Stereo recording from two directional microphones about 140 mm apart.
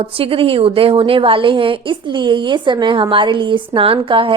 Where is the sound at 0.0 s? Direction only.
40° right (ahead or behind).